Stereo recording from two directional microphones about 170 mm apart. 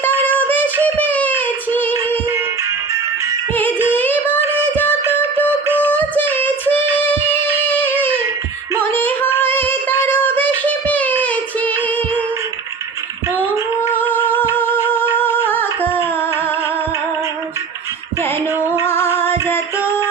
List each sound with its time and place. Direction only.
0.0 s a sound: 10° left (ahead or behind)
3.5 s music: 10° left (ahead or behind)
3.9 s a sound: 10° left (ahead or behind)
4.3 s a sound: 15° right (ahead or behind)
4.7 s music: 10° left (ahead or behind)
5.9 s child singing: 10° left (ahead or behind)
7.7 s a sound: 10° left (ahead or behind)
8.8 s female singing: 10° left (ahead or behind)
10.7 s child singing: 10° left (ahead or behind)
13.4 s female singing: 15° right (ahead or behind)
14.5 s music: 10° left (ahead or behind)
14.8 s humming: 10° left (ahead or behind)
18.6 s music: 10° right (ahead or behind)
18.9 s music: 15° left (ahead or behind)